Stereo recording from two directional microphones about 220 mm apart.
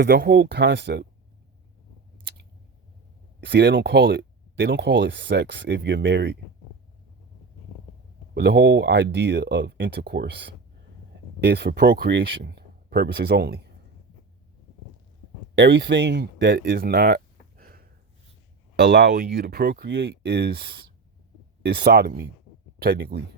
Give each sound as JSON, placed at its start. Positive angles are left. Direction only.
{"t": 0.0, "sound": "speech", "side_deg": -45}
{"t": 3.4, "sound": "speech", "side_deg": -50}
{"t": 8.4, "sound": "speech", "side_deg": -50}
{"t": 15.5, "sound": "speech", "side_deg": -55}
{"t": 17.6, "sound": "a sound", "side_deg": -40}
{"t": 19.0, "sound": "speech", "side_deg": -40}